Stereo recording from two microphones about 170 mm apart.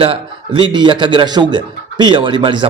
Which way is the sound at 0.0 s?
30° right (ahead or behind).